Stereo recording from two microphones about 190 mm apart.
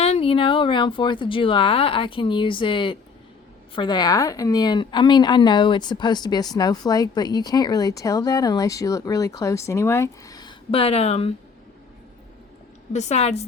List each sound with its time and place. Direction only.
0.0 s a woman's voice: 30° left (ahead or behind)
12.9 s a woman's voice: 35° left (ahead or behind)